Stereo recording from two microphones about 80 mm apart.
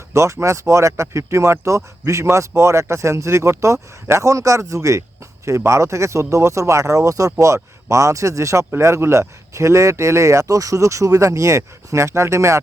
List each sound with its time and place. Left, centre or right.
0.1 s speech: right